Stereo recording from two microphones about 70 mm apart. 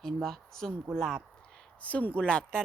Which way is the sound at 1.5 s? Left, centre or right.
Centre.